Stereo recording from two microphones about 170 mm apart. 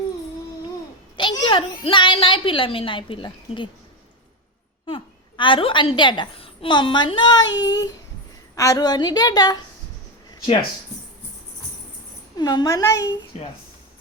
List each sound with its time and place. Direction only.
1.1 s a child's voice: 30° left (ahead or behind)
4.9 s a child's voice: 30° left (ahead or behind)
8.5 s a child's voice: 20° left (ahead or behind)
10.3 s a sound: 30° left (ahead or behind)
12.4 s a child's voice: 25° left (ahead or behind)
13.3 s speech: 40° left (ahead or behind)